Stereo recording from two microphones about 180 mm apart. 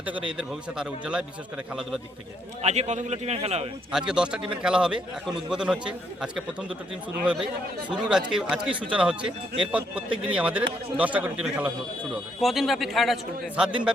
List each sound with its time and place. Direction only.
0.0 s a man's voice: 5° right (ahead or behind)
2.6 s a man's voice: 40° right (ahead or behind)
3.9 s a man's voice: 5° right (ahead or behind)
7.9 s a man's voice: 5° right (ahead or behind)